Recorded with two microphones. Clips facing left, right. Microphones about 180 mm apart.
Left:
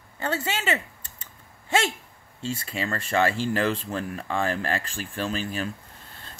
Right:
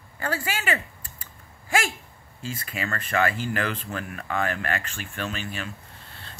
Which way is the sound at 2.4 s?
25° left (ahead or behind).